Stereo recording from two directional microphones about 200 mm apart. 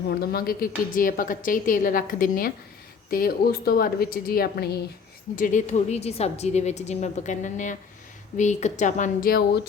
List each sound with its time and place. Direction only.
0.1 s a woman's voice: 50° left (ahead or behind)
5.4 s a woman's voice: 40° left (ahead or behind)